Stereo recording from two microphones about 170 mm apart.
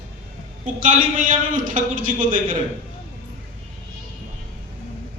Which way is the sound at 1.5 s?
55° right (ahead or behind).